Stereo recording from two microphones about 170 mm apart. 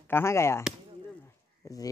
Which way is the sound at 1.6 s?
20° left (ahead or behind).